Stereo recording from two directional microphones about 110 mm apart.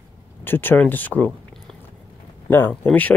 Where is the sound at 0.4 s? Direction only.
20° left (ahead or behind).